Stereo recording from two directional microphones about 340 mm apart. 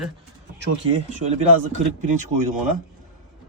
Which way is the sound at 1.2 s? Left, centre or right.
Right.